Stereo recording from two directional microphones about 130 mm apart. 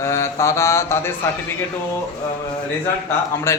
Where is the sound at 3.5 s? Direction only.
20° left (ahead or behind).